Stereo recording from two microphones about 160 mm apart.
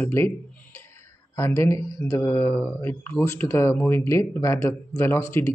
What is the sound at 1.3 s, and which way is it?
Speech, 20° left (ahead or behind).